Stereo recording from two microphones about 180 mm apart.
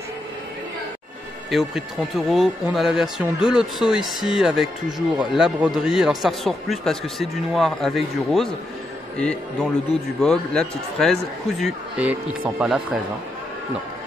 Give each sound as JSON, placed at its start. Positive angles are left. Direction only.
{"t": 1.5, "sound": "a man's voice", "side_deg": 0}
{"t": 11.6, "sound": "a man's voice", "side_deg": -10}